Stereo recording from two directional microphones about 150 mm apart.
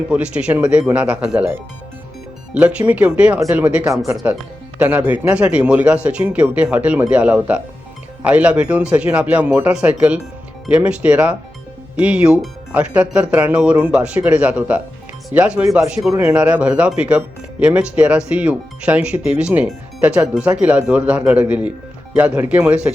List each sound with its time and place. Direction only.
0.1 s speech: 10° right (ahead or behind)
3.8 s speech: 20° right (ahead or behind)